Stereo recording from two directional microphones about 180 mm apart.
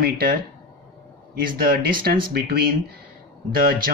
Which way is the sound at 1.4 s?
55° right (ahead or behind).